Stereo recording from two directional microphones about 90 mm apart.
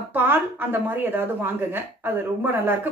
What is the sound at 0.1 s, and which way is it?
A woman's voice, 25° right (ahead or behind).